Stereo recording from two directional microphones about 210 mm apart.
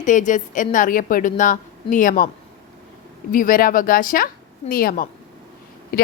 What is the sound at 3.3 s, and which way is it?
A woman's voice, 40° left (ahead or behind).